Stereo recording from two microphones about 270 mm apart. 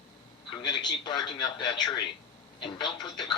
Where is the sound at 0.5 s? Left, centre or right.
Centre.